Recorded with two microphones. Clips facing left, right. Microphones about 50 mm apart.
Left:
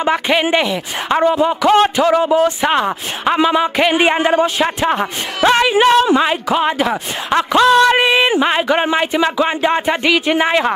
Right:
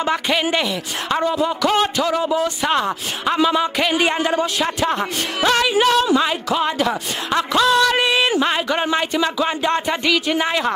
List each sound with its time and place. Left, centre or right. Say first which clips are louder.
0.0 s speech: left 4 dB; left